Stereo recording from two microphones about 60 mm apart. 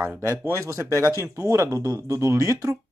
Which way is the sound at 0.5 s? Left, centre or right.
Right.